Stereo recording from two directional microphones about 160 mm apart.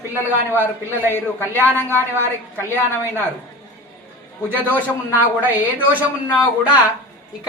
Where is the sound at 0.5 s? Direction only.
15° right (ahead or behind).